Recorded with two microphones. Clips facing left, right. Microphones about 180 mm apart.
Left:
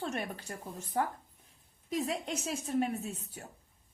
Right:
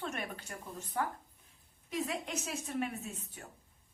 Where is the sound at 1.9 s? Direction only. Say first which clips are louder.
Left 3 dB; 35° left (ahead or behind).